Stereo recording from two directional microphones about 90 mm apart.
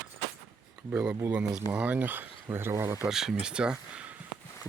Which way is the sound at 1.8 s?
15° right (ahead or behind).